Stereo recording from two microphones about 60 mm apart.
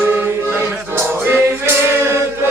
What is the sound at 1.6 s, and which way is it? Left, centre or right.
Male singing, right.